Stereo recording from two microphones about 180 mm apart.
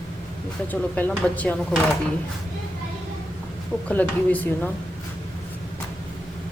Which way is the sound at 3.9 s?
10° left (ahead or behind).